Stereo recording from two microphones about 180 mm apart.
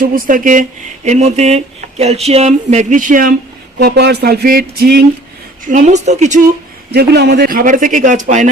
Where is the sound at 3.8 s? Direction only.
65° right (ahead or behind).